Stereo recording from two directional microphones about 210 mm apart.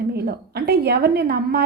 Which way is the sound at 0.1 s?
50° right (ahead or behind).